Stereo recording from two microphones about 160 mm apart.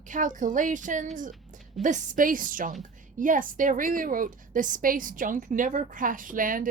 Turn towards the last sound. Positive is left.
turn(degrees=-60)  # may be behind; listen again after turning